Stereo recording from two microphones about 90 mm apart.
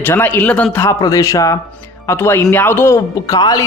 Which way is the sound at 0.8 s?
40° left (ahead or behind).